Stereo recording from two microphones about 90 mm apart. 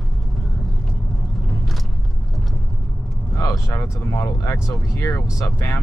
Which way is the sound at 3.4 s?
35° left (ahead or behind).